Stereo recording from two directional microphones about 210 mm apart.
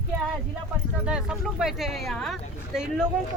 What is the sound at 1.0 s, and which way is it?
Speech, 5° right (ahead or behind).